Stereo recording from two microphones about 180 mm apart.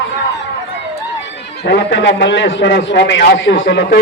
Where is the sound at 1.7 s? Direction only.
75° left (ahead or behind).